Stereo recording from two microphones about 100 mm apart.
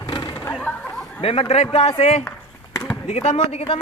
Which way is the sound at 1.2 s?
75° left (ahead or behind).